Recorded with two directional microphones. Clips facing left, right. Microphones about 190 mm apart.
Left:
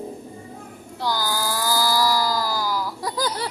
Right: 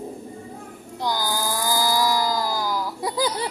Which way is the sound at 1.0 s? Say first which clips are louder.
Even; 15° right (ahead or behind).